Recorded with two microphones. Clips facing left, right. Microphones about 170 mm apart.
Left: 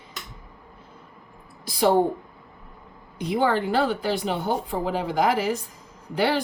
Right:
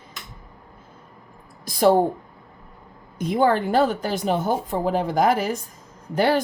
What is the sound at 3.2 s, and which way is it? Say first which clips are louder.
Speech: right 3 dB; 45° right (ahead or behind).